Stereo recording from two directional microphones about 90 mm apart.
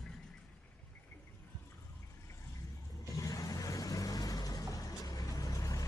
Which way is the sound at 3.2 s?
40° left (ahead or behind).